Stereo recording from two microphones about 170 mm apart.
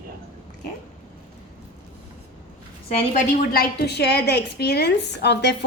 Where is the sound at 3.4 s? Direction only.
65° left (ahead or behind).